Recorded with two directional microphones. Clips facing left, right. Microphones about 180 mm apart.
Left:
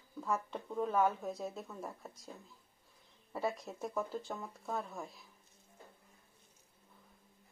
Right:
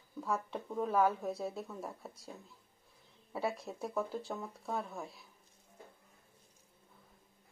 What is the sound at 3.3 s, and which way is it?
Speech, centre (ahead or behind).